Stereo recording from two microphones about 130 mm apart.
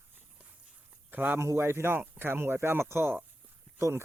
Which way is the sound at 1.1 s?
15° right (ahead or behind).